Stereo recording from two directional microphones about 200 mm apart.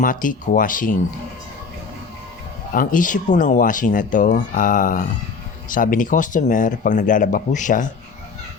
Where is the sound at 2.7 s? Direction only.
40° left (ahead or behind).